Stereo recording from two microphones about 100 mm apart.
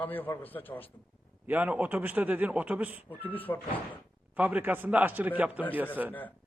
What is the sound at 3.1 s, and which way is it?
Speech, 20° left (ahead or behind).